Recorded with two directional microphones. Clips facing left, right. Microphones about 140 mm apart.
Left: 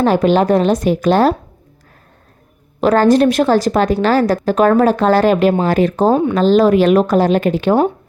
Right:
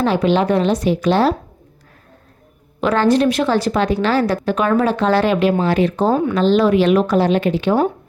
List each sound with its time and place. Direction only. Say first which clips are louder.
0.0 s a woman's voice: left 3 dB; 45° left (ahead or behind)
2.8 s a woman's voice: left 4 dB; 45° left (ahead or behind)